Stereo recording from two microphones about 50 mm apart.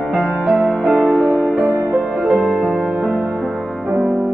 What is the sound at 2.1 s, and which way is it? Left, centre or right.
Music, right.